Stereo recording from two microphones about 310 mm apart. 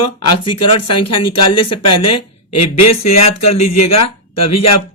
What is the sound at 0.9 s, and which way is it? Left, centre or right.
Speech, left.